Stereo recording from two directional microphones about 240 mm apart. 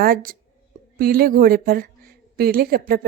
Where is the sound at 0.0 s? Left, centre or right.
Right.